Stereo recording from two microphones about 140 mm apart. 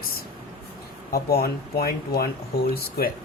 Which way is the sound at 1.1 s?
90° left.